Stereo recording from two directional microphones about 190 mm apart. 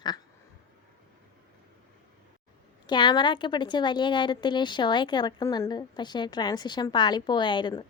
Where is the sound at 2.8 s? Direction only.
25° left (ahead or behind).